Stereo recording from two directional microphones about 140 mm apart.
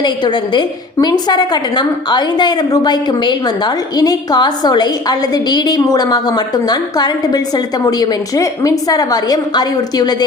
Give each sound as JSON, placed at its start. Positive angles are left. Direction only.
{"t": 0.0, "sound": "a woman's voice", "side_deg": 30}